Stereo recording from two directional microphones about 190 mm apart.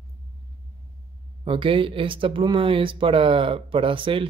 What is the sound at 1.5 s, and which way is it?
Speech, 30° right (ahead or behind).